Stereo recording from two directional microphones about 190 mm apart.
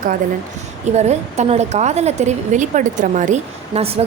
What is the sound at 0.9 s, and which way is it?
A woman's voice, 35° right (ahead or behind).